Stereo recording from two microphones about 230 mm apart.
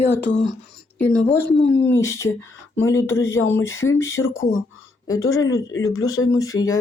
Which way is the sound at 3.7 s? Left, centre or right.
Left.